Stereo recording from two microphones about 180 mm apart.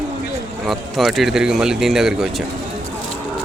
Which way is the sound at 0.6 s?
Centre (ahead or behind).